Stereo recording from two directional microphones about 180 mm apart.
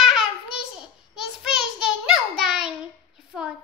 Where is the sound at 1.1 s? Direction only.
5° right (ahead or behind).